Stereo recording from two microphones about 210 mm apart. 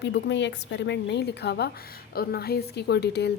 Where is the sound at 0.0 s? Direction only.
55° left (ahead or behind).